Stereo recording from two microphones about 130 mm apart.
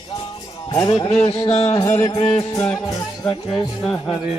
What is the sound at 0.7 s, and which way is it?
Music, 35° left (ahead or behind).